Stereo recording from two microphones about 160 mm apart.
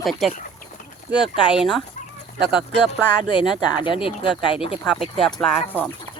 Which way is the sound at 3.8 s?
30° left (ahead or behind).